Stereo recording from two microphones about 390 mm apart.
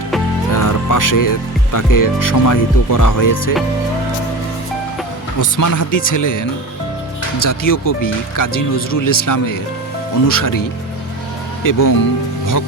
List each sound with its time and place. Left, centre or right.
0.5 s music: left
1.7 s speech: left
5.4 s speech: left